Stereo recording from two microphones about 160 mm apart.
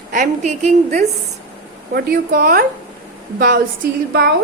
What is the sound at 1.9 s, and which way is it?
Speech, 65° right (ahead or behind).